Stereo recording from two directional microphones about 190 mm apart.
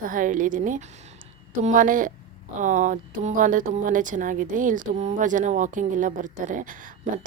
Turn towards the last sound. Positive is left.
turn(degrees=-45)  # may be behind; listen again after turning